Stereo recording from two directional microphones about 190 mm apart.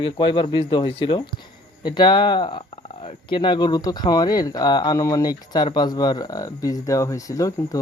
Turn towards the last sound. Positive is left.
turn(degrees=15)  # may be behind; listen again after turning